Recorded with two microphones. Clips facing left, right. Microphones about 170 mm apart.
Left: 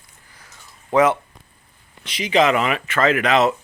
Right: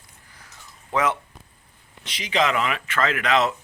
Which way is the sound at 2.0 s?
10° left (ahead or behind).